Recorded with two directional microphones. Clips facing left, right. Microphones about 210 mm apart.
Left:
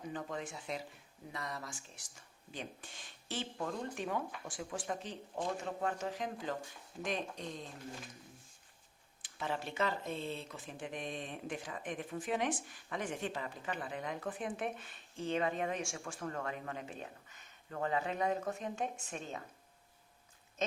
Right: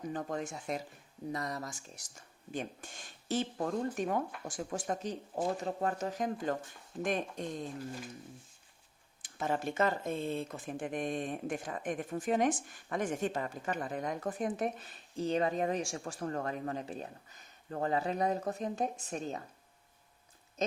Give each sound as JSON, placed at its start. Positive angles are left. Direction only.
{"t": 0.1, "sound": "speech", "side_deg": -45}
{"t": 9.2, "sound": "speech", "side_deg": -45}
{"t": 20.6, "sound": "goat", "side_deg": -35}